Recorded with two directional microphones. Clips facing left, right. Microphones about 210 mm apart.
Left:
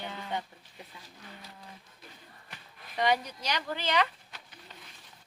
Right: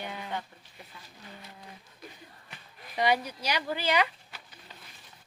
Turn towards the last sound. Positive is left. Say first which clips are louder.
# right 2 dB
turn(degrees=-10)  # may be behind; listen again after turning